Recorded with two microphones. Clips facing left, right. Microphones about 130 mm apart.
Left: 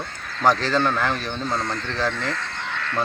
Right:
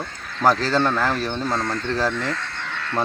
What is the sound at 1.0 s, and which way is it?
Speech, 5° right (ahead or behind).